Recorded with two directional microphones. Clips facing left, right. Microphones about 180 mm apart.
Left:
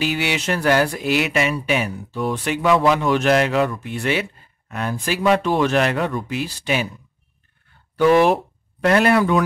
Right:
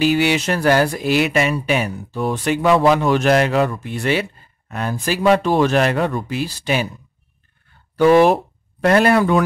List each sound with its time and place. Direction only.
0.0 s speech: 40° right (ahead or behind)
7.9 s speech: 40° right (ahead or behind)